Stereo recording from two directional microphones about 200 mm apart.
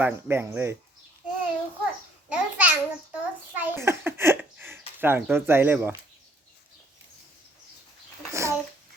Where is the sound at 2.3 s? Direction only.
5° right (ahead or behind).